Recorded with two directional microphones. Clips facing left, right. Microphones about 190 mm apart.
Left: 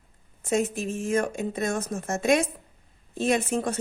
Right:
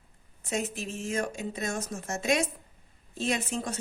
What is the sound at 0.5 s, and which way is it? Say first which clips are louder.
A woman's voice: left 7 dB; 50° left (ahead or behind).